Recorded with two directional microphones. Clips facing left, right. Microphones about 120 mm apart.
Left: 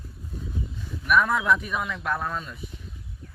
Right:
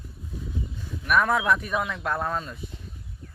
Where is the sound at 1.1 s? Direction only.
50° right (ahead or behind).